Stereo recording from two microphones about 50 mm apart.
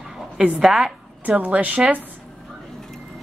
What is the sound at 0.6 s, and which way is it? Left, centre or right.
Speech, centre.